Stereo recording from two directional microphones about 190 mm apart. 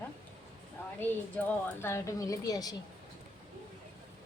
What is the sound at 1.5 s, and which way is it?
Speech, 15° left (ahead or behind).